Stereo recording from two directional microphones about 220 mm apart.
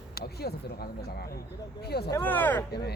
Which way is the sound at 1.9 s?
45° left (ahead or behind).